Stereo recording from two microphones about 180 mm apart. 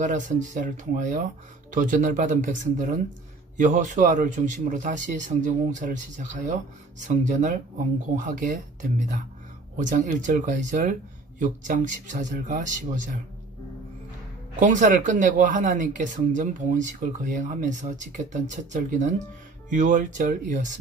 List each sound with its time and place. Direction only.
0.0 s a man's voice: 45° right (ahead or behind)
9.8 s a man's voice: 45° right (ahead or behind)
14.6 s a man's voice: 45° right (ahead or behind)